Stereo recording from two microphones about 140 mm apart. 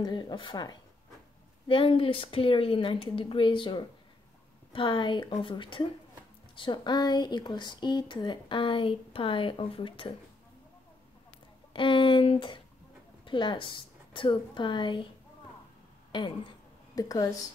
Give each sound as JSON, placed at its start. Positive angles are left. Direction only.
{"t": 0.0, "sound": "speech", "side_deg": 35}
{"t": 11.7, "sound": "speech", "side_deg": 35}
{"t": 16.1, "sound": "a woman's voice", "side_deg": 35}